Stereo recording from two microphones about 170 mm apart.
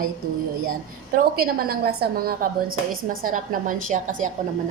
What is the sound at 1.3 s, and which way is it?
A woman's voice, 60° right (ahead or behind).